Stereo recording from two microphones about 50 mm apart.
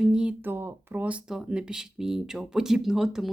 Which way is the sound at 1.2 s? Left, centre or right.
Centre.